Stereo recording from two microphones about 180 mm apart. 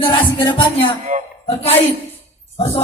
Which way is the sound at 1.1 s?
40° right (ahead or behind).